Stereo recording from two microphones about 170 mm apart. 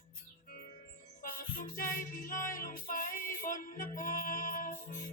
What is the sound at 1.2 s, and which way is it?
Music, 55° left (ahead or behind).